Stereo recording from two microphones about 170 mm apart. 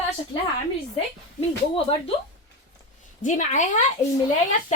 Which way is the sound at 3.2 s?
45° left (ahead or behind).